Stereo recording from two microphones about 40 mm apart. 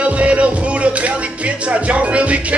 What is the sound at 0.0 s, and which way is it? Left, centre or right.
Music, right.